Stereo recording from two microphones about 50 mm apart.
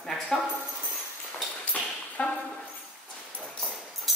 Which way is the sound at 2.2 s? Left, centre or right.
Left.